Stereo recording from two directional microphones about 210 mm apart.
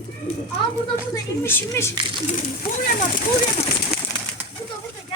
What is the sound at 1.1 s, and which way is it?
Speech, 15° left (ahead or behind).